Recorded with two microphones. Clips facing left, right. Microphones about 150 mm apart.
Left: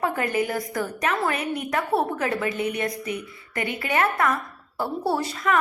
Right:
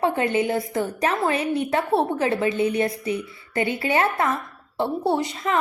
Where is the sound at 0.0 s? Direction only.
25° right (ahead or behind).